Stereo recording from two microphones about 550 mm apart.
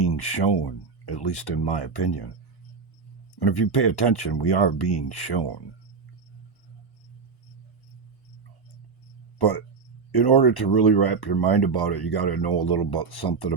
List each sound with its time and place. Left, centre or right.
0.0 s speech: left
3.3 s speech: left
9.4 s speech: left